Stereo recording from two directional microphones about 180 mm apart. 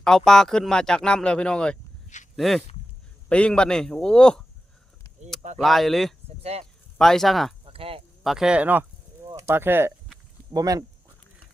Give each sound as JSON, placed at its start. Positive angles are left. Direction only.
{"t": 0.3, "sound": "speech", "side_deg": 5}
{"t": 5.5, "sound": "speech", "side_deg": 0}
{"t": 6.4, "sound": "speech", "side_deg": -35}
{"t": 7.0, "sound": "speech", "side_deg": 0}
{"t": 7.6, "sound": "a sound", "side_deg": -30}
{"t": 8.2, "sound": "speech", "side_deg": 0}